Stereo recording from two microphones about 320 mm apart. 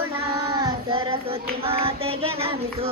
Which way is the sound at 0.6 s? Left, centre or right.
Centre.